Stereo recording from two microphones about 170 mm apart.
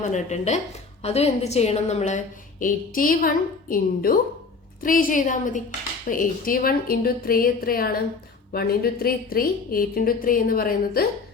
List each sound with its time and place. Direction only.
0.1 s a woman's voice: 40° left (ahead or behind); by 11.0 s 60° left (ahead or behind)